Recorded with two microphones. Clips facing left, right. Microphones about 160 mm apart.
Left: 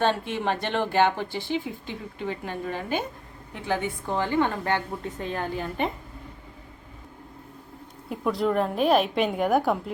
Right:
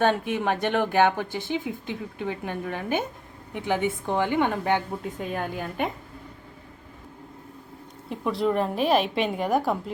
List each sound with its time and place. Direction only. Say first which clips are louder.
0.0 s speech: right 2 dB; 15° right (ahead or behind)
5.0 s a woman's voice: even; 5° right (ahead or behind)
8.1 s a woman's voice: even; centre (ahead or behind)